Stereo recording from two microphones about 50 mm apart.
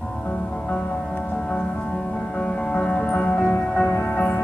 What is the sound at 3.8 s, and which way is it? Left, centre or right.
Music, left.